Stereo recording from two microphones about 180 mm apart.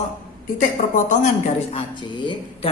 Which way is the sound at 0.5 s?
45° left (ahead or behind).